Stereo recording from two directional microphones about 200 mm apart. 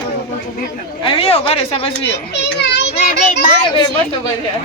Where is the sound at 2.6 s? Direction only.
60° left (ahead or behind).